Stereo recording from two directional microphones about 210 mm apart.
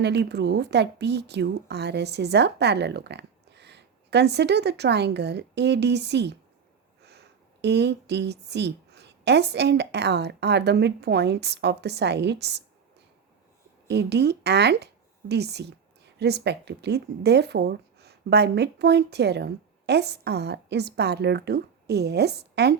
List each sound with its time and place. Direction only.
0.0 s speech: 55° right (ahead or behind)
13.8 s speech: 55° right (ahead or behind)